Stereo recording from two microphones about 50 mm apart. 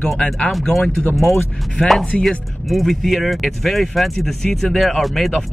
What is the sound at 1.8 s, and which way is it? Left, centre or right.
Speech, left.